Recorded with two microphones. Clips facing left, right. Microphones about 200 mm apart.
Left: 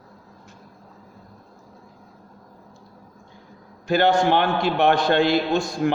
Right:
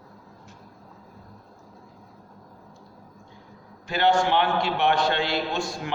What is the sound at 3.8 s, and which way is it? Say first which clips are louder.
A man's voice: left 4 dB; 45° left (ahead or behind).